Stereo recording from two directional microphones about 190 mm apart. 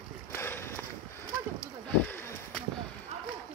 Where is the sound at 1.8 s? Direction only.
10° left (ahead or behind).